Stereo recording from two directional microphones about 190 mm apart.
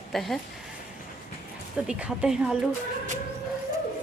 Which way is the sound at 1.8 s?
5° right (ahead or behind).